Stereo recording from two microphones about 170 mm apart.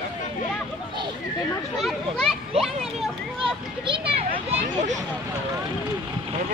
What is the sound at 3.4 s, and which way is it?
Children playing, 30° right (ahead or behind).